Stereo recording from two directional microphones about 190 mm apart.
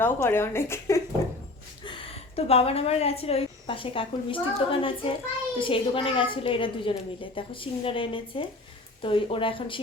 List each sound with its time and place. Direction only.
0.0 s a woman's voice: 15° left (ahead or behind)
1.8 s a woman's voice: 30° left (ahead or behind)